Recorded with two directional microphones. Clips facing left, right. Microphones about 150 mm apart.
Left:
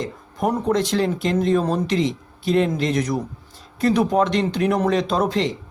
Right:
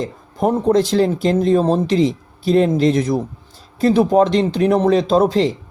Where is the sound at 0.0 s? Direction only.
35° right (ahead or behind).